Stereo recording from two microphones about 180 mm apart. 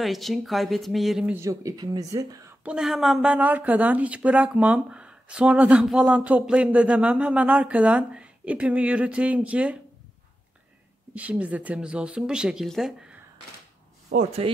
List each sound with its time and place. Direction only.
0.0 s speech: centre (ahead or behind)
1.3 s speech: 15° right (ahead or behind)
2.6 s speech: 5° right (ahead or behind)
11.1 s speech: 10° right (ahead or behind)
14.1 s speech: 35° right (ahead or behind)